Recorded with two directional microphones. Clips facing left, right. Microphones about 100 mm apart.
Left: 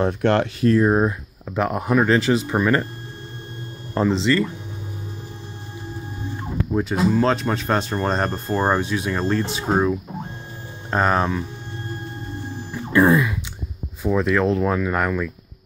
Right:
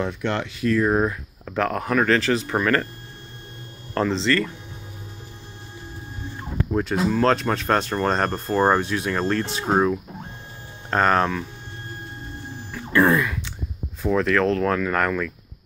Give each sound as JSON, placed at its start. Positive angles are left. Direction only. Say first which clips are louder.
{"t": 0.2, "sound": "speech", "louder": "left 7 dB", "side_deg": 55}
{"t": 0.6, "sound": "speech", "louder": "even", "side_deg": 35}
{"t": 0.8, "sound": "speech", "louder": "left 2 dB", "side_deg": 20}
{"t": 3.9, "sound": "speech", "louder": "left 2 dB", "side_deg": 10}
{"t": 6.7, "sound": "speech", "louder": "left 2 dB", "side_deg": 5}
{"t": 12.7, "sound": "music", "louder": "left 2 dB", "side_deg": 15}
{"t": 14.0, "sound": "speech", "louder": "left 1 dB", "side_deg": 10}